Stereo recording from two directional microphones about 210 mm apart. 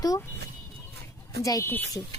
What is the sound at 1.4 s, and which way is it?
Speech, 15° left (ahead or behind).